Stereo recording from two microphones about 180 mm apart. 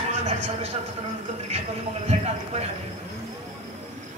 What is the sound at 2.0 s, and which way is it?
Speech, 35° right (ahead or behind).